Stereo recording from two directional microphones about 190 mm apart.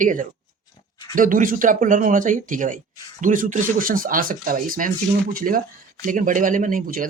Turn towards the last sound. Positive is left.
turn(degrees=-45)  # may be behind; listen again after turning